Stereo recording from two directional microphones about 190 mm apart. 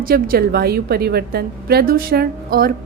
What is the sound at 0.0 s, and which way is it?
A woman's voice, 50° right (ahead or behind).